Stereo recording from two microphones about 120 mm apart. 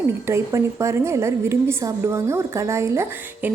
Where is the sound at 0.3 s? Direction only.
25° right (ahead or behind).